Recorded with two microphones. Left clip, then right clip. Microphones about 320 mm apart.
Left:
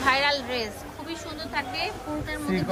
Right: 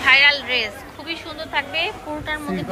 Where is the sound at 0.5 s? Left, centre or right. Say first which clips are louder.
Right 8 dB; centre.